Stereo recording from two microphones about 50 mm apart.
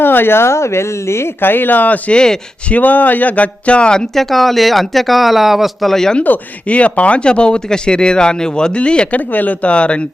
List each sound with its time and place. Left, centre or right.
0.0 s speech: left
2.0 s speech: centre
2.6 s speech: left
4.1 s speech: centre
5.9 s speech: centre
6.2 s speech: left
9.3 s speech: left